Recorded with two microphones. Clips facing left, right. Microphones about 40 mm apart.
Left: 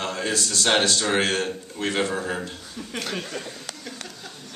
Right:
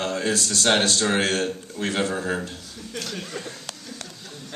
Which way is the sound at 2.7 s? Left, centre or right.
Left.